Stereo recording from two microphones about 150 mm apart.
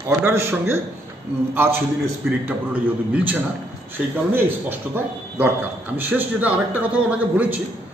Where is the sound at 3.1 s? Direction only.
10° right (ahead or behind).